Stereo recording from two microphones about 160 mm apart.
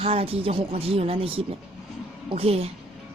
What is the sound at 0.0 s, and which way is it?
Speech, 40° right (ahead or behind).